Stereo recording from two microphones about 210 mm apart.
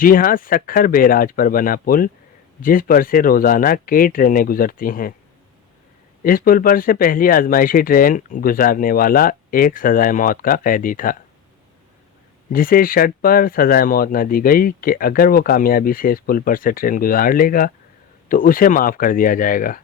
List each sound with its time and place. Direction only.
0.0 s speech: 40° left (ahead or behind)
6.2 s speech: 45° left (ahead or behind)
12.5 s speech: 40° left (ahead or behind)